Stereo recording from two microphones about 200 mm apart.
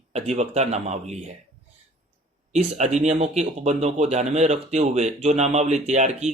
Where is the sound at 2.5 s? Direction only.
35° right (ahead or behind).